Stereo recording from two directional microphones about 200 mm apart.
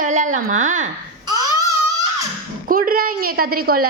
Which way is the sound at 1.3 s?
20° right (ahead or behind).